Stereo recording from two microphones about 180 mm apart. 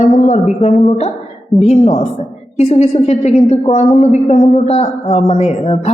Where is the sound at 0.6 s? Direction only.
35° left (ahead or behind).